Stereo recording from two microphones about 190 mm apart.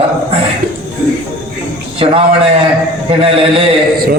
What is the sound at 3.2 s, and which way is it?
Speech, 30° right (ahead or behind).